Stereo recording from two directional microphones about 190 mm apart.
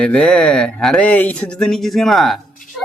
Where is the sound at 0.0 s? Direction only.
5° left (ahead or behind).